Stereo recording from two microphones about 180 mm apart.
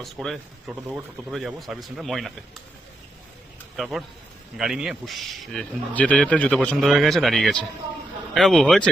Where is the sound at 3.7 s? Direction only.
Centre (ahead or behind).